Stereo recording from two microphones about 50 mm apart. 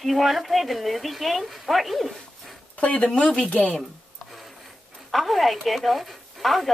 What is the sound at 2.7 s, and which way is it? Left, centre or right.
Speech, left.